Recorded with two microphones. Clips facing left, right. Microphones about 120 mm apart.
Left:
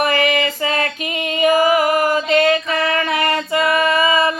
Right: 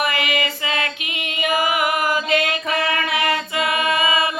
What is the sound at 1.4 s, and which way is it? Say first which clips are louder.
Music: left 6 dB; 40° left (ahead or behind).